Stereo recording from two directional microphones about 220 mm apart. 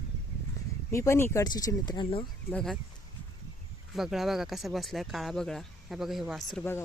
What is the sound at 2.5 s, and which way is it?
Speech, centre (ahead or behind).